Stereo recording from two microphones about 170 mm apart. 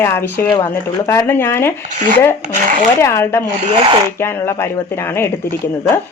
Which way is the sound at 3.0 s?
15° left (ahead or behind).